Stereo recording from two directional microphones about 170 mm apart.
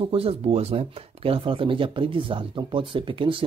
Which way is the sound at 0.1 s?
35° right (ahead or behind).